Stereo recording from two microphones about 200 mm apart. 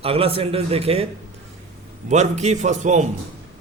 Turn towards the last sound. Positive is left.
turn(degrees=-35)  # may be behind; listen again after turning